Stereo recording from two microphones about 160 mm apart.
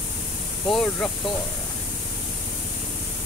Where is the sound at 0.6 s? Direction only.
5° left (ahead or behind).